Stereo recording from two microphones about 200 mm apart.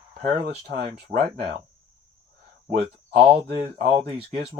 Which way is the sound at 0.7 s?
50° right (ahead or behind).